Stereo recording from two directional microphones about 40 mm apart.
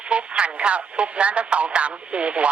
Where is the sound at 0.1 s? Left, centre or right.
Right.